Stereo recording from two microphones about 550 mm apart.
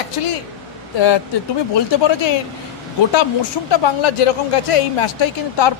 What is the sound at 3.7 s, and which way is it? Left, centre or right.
A woman's voice, left.